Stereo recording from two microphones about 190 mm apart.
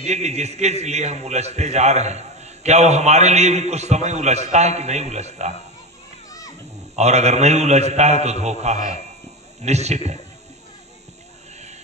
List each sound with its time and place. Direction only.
0.0 s a man's voice: 35° right (ahead or behind)
7.0 s a man's voice: 35° right (ahead or behind)